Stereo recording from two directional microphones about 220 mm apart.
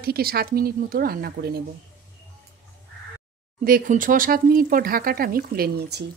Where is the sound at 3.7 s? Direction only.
40° right (ahead or behind).